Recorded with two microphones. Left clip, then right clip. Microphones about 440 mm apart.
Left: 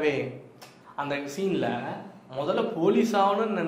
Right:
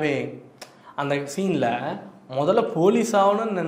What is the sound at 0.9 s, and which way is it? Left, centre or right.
Speech, right.